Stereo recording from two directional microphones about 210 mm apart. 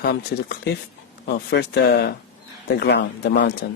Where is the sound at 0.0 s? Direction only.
50° left (ahead or behind).